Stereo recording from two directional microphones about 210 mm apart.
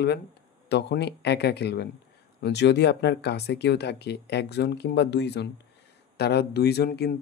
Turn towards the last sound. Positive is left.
turn(degrees=50)  # may be behind; listen again after turning